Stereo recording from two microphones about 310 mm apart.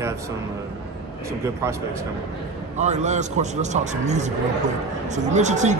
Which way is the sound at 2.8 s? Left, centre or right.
Right.